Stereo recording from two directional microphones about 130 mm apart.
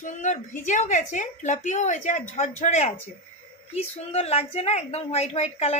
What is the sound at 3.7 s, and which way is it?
A woman's voice, 50° left (ahead or behind).